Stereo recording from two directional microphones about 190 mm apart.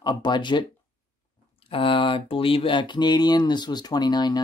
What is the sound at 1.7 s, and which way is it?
Speech, 25° left (ahead or behind).